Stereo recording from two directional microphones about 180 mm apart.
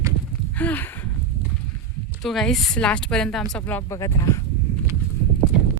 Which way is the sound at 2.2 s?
Centre (ahead or behind).